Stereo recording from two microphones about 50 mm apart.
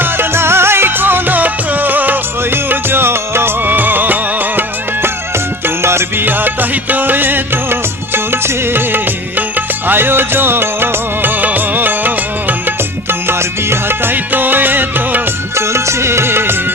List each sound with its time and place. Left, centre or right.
0.0 s music: right
5.6 s music: right
6.2 s music of bollywood: right
9.6 s music: right
15.5 s music: right